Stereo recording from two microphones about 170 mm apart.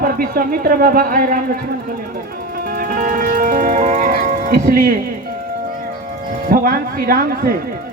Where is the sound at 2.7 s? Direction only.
60° right (ahead or behind).